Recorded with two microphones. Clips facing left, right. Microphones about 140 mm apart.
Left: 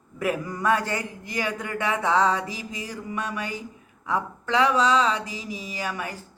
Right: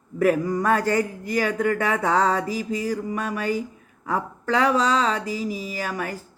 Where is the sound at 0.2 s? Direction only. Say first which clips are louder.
Right 7 dB; 40° right (ahead or behind).